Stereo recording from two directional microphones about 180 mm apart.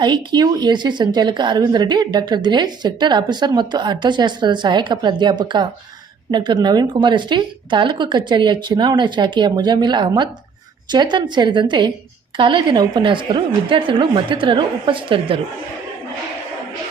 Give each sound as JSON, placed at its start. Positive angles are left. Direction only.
{"t": 0.0, "sound": "a woman's voice", "side_deg": -25}